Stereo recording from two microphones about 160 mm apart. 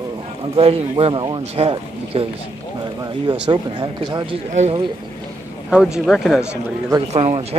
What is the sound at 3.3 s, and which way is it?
Speech, 25° right (ahead or behind).